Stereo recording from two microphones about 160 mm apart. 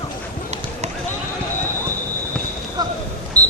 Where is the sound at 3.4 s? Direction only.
20° right (ahead or behind).